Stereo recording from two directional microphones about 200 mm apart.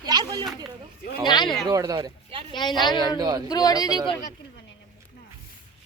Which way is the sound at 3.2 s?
20° right (ahead or behind).